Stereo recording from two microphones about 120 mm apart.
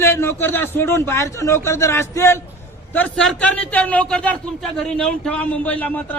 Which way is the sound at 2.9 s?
10° left (ahead or behind).